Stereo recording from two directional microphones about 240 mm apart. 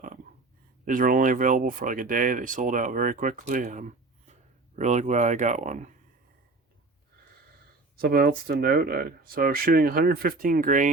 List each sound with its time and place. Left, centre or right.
0.9 s speech: right
7.9 s speech: right